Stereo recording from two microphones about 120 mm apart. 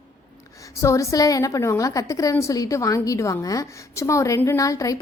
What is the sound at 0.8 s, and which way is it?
A woman's voice, 25° left (ahead or behind).